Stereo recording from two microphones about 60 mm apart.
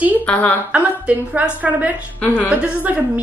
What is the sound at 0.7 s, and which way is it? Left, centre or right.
A woman's voice, right.